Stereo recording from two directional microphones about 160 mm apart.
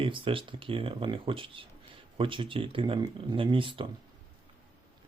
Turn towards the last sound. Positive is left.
turn(degrees=-30)  # may be behind; listen again after turning